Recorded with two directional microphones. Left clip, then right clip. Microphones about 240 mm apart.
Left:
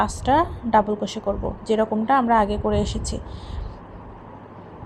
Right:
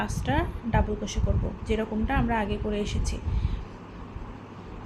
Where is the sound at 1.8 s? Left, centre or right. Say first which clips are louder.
Left 12 dB; centre.